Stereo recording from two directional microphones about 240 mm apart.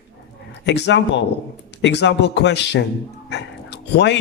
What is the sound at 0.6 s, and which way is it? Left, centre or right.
Speech, left.